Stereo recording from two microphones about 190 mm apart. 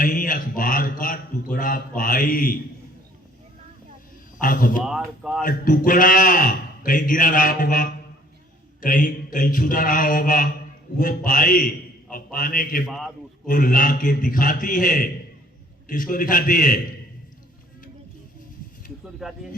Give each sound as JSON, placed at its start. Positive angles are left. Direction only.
{"t": 0.0, "sound": "a man's voice", "side_deg": 45}
{"t": 4.4, "sound": "speech", "side_deg": 45}
{"t": 4.9, "sound": "a man's voice", "side_deg": -5}
{"t": 5.4, "sound": "a man's voice", "side_deg": 45}
{"t": 12.8, "sound": "a man's voice", "side_deg": 0}
{"t": 13.5, "sound": "a man's voice", "side_deg": 45}
{"t": 19.2, "sound": "a man's voice", "side_deg": 0}